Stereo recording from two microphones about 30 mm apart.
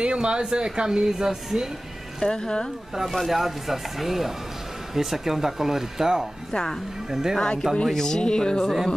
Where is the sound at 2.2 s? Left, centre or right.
Left.